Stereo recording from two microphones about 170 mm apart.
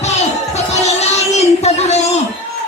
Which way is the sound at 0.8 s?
40° left (ahead or behind).